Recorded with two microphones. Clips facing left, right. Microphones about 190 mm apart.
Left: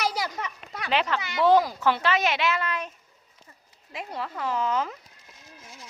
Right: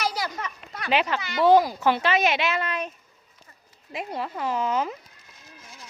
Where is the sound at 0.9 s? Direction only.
10° right (ahead or behind).